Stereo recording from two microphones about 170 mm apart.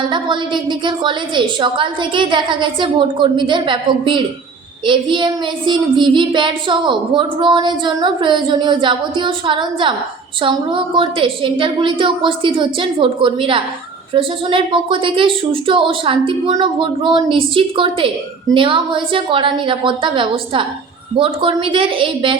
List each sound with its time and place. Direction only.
0.0 s a woman's voice: 30° right (ahead or behind)